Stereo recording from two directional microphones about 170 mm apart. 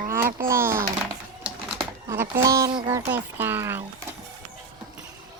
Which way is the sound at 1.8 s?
15° right (ahead or behind).